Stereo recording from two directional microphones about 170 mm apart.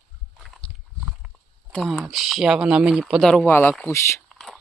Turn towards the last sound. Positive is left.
turn(degrees=15)  # may be behind; listen again after turning